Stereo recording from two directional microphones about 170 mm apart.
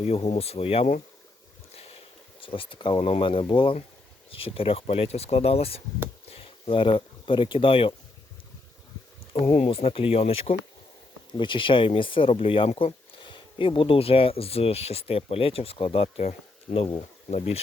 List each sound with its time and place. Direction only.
0.0 s speech: 40° left (ahead or behind)
2.4 s speech: 30° left (ahead or behind)
9.3 s speech: 35° left (ahead or behind)